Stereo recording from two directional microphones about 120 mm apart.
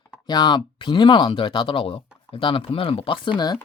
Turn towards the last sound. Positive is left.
turn(degrees=45)  # may be behind; listen again after turning